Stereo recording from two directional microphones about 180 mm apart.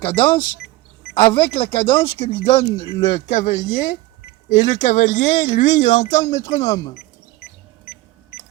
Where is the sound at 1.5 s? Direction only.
30° left (ahead or behind).